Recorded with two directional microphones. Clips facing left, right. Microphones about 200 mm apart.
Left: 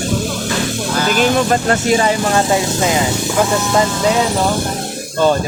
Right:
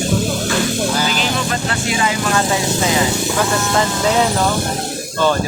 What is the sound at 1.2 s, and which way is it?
Speech, 45° left (ahead or behind).